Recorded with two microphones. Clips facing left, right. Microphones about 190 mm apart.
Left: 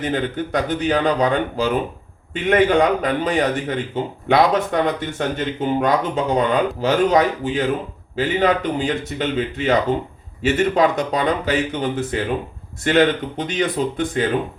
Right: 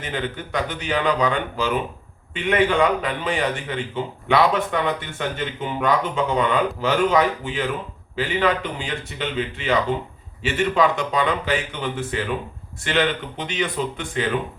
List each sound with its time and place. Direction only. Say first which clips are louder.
0.0 s a man's voice: left 6 dB; 40° left (ahead or behind)